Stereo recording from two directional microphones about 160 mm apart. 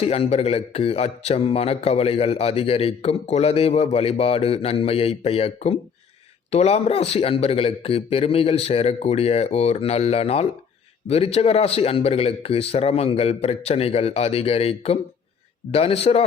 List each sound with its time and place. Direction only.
0.0 s a man's voice: 35° left (ahead or behind)